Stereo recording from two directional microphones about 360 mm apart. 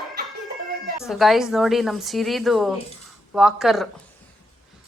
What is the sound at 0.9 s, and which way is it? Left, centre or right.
A woman's voice, centre.